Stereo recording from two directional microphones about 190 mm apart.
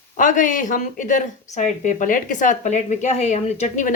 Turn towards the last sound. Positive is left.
turn(degrees=40)  # may be behind; listen again after turning